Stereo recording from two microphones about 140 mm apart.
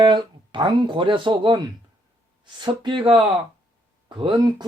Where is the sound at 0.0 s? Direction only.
35° right (ahead or behind).